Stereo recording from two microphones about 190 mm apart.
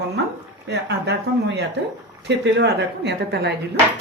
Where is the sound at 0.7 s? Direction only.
65° right (ahead or behind).